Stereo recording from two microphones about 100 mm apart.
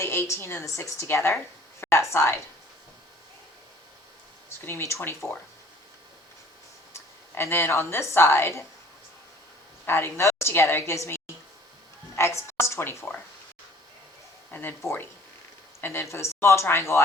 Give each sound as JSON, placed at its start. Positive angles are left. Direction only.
{"t": 0.0, "sound": "a woman's voice", "side_deg": 25}
{"t": 4.6, "sound": "a woman's voice", "side_deg": 25}
{"t": 6.9, "sound": "a woman's voice", "side_deg": 25}
{"t": 9.8, "sound": "a woman's voice", "side_deg": 25}
{"t": 14.5, "sound": "a woman's voice", "side_deg": 20}